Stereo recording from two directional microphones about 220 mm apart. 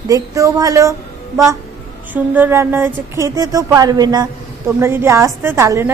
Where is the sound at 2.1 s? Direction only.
10° right (ahead or behind).